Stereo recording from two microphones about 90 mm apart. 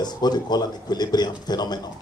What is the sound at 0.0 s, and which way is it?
Speech, 50° left (ahead or behind).